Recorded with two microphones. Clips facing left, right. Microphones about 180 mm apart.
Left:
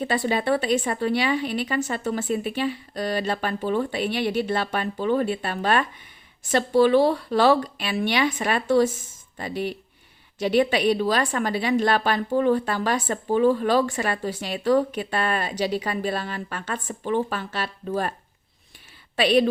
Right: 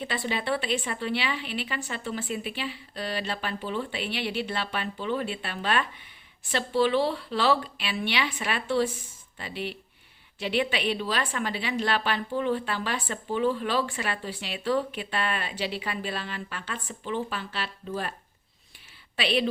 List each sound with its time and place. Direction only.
0.0 s a woman's voice: 45° left (ahead or behind)
19.1 s a woman's voice: 45° left (ahead or behind)